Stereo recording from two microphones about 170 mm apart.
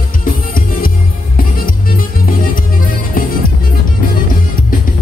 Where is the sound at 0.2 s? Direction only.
55° left (ahead or behind).